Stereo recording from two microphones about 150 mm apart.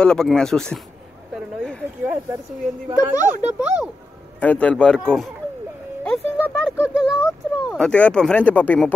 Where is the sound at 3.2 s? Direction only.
60° right (ahead or behind).